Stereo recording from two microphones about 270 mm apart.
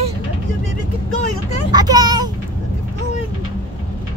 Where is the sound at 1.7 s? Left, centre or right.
Centre.